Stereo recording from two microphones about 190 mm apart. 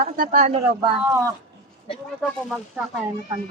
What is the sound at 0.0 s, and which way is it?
Speech, 45° right (ahead or behind).